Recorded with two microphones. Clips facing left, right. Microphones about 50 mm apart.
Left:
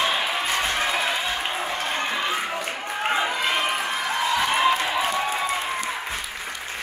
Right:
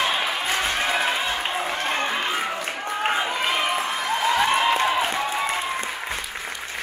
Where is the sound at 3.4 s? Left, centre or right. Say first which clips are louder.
Right 1 dB; centre.